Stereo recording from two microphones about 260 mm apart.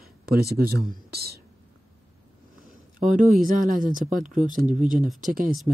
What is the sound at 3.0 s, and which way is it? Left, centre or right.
Speech, right.